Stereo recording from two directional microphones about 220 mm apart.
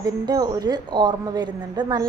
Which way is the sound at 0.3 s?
15° right (ahead or behind).